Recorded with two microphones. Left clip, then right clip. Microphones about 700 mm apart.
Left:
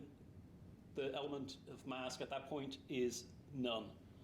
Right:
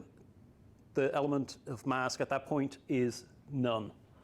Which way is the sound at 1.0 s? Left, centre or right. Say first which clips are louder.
Right 12 dB; right.